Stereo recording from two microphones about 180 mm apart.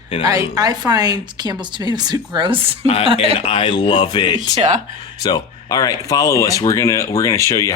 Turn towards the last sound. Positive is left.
turn(degrees=15)  # may be behind; listen again after turning